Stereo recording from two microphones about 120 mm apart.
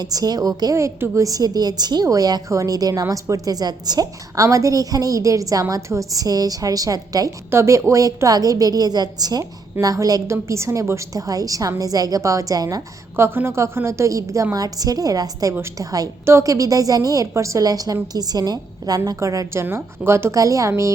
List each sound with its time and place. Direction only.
0.0 s a woman's voice: 35° right (ahead or behind)